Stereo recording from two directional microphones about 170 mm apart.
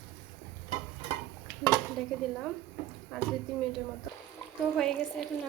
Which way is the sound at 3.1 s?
Centre (ahead or behind).